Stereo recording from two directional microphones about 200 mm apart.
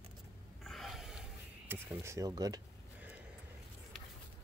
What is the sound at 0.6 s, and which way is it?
Rub, centre (ahead or behind).